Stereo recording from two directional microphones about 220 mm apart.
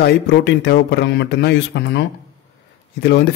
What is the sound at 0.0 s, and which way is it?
Speech, 50° left (ahead or behind).